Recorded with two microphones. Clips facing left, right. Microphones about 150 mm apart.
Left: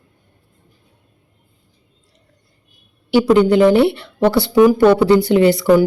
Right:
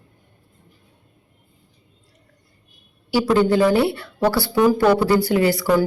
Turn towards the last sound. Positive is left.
turn(degrees=20)  # may be behind; listen again after turning